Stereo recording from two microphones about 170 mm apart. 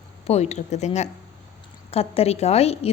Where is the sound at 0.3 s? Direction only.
40° left (ahead or behind).